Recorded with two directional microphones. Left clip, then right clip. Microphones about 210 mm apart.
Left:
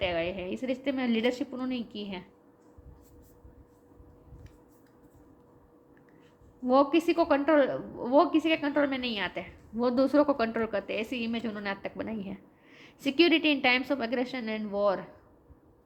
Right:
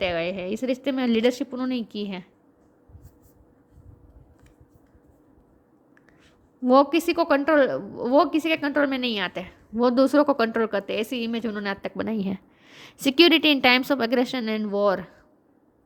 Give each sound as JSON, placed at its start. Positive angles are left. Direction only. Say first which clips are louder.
{"t": 0.0, "sound": "a woman's voice", "louder": "right 5 dB", "side_deg": -50}
{"t": 6.7, "sound": "a woman's voice", "louder": "right 5 dB", "side_deg": -50}